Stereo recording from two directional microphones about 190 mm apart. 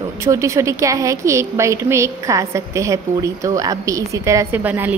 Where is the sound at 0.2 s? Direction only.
15° right (ahead or behind).